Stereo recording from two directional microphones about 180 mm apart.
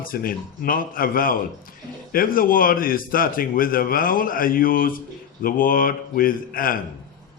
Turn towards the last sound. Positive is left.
turn(degrees=50)  # may be behind; listen again after turning